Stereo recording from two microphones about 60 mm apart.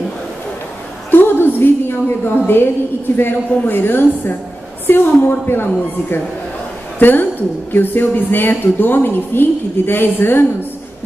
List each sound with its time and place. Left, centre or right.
1.1 s a sound: left
3.2 s speech: left
7.0 s speech: left